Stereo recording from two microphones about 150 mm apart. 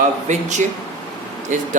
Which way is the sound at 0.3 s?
50° right (ahead or behind).